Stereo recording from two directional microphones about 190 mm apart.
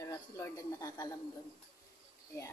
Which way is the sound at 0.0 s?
15° left (ahead or behind).